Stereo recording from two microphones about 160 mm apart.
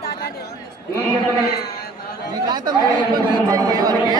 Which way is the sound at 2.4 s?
25° right (ahead or behind).